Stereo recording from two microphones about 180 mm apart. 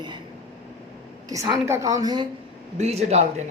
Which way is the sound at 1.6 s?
15° right (ahead or behind).